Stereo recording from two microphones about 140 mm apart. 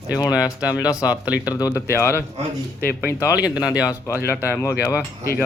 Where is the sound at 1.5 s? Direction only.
25° left (ahead or behind).